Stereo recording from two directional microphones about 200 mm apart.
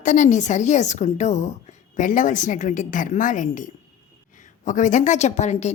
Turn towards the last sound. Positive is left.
turn(degrees=35)  # may be behind; listen again after turning